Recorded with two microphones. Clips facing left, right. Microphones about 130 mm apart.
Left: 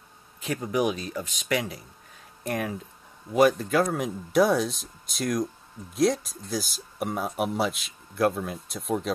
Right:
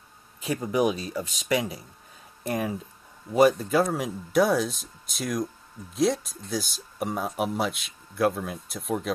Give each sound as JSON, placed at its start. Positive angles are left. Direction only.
{"t": 0.6, "sound": "speech", "side_deg": -30}
{"t": 3.3, "sound": "speech", "side_deg": 0}